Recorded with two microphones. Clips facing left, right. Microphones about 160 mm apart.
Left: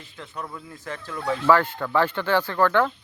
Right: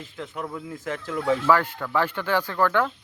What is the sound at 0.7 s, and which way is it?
Speech, 90° right.